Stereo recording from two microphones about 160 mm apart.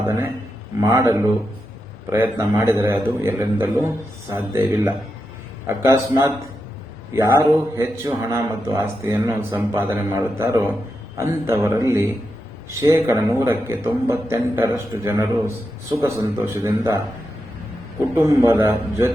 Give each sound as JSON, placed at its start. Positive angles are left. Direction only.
{"t": 0.0, "sound": "a man's voice", "side_deg": -20}
{"t": 18.1, "sound": "a man's voice", "side_deg": -15}